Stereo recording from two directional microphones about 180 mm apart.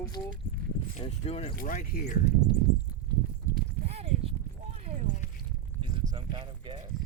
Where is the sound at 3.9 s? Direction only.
35° right (ahead or behind).